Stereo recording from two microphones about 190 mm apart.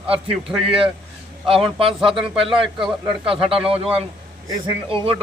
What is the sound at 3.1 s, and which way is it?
Speech, 30° right (ahead or behind).